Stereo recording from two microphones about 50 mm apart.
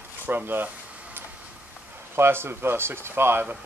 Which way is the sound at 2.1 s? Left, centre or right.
Right.